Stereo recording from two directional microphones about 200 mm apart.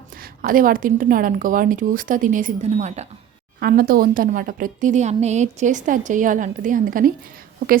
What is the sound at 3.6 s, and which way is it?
A woman's voice, 50° right (ahead or behind).